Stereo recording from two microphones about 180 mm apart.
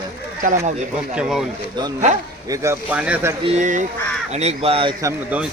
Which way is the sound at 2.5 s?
10° right (ahead or behind).